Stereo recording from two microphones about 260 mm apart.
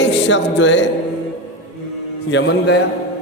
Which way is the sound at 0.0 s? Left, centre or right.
Left.